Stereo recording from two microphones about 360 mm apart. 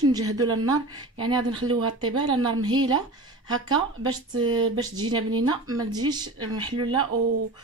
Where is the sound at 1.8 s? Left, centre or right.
Right.